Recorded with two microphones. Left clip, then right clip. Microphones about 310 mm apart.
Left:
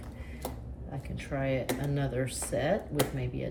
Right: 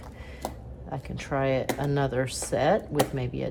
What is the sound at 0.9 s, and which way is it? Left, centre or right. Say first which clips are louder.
A woman's voice: right 7 dB; centre.